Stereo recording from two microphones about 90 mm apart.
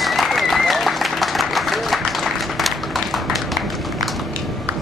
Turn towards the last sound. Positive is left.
turn(degrees=0)  # may be behind; listen again after turning